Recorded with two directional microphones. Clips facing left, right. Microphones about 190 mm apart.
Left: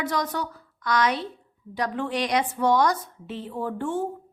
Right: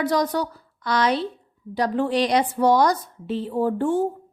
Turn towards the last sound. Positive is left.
turn(degrees=-35)  # may be behind; listen again after turning